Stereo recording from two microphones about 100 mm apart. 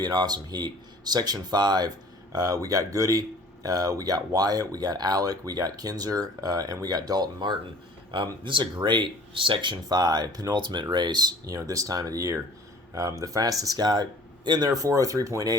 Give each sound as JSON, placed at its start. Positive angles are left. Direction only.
{"t": 0.0, "sound": "speech", "side_deg": -40}